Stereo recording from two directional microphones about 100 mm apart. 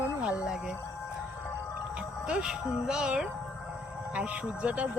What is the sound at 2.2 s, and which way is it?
Speech, 10° right (ahead or behind).